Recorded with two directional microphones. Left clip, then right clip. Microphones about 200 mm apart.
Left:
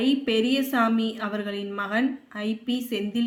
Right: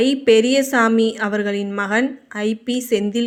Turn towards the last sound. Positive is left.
turn(degrees=-40)  # may be behind; listen again after turning